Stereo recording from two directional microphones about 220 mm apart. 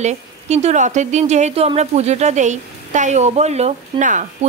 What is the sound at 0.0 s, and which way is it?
Speech, 30° right (ahead or behind).